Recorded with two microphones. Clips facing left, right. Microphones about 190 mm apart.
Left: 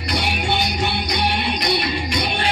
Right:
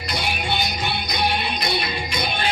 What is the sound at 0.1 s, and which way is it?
Music, 70° left (ahead or behind).